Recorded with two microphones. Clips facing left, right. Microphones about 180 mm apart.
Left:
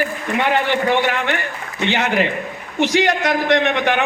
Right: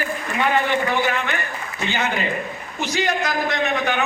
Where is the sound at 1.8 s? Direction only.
90° left.